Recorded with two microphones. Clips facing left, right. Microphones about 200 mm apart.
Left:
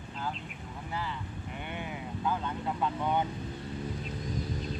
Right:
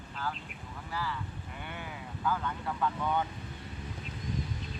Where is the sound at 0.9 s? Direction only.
20° left (ahead or behind).